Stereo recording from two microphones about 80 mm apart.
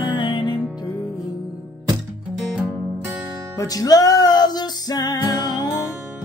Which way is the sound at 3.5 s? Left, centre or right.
Left.